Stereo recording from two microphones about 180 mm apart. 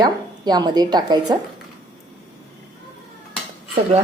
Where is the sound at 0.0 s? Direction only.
25° right (ahead or behind).